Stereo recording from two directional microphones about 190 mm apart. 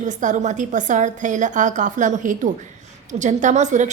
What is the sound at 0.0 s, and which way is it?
A woman's voice, 40° right (ahead or behind).